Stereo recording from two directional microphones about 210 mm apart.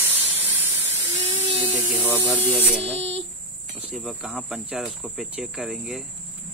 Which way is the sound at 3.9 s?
5° right (ahead or behind).